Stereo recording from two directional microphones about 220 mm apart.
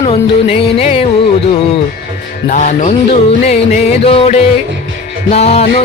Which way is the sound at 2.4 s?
35° left (ahead or behind).